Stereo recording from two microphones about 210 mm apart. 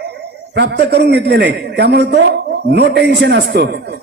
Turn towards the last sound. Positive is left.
turn(degrees=-50)  # may be behind; listen again after turning